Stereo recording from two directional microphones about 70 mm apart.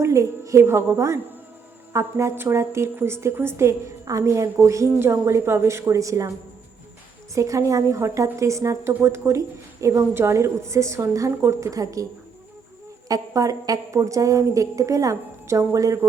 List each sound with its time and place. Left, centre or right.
0.0 s a woman's voice: right
7.3 s a woman's voice: right
13.1 s a woman's voice: right